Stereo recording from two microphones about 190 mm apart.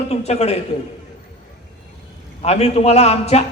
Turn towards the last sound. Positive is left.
turn(degrees=35)  # may be behind; listen again after turning